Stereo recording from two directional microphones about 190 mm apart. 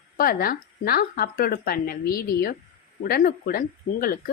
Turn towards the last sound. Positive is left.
turn(degrees=50)  # may be behind; listen again after turning